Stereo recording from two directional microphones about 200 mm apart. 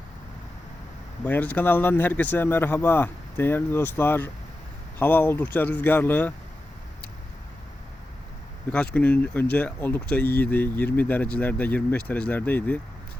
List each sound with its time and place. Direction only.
1.2 s speech: 10° left (ahead or behind)
8.7 s speech: 5° left (ahead or behind)